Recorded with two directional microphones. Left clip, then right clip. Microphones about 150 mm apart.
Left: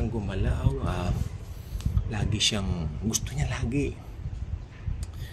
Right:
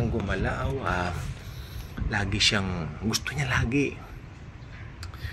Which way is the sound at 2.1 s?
20° left (ahead or behind).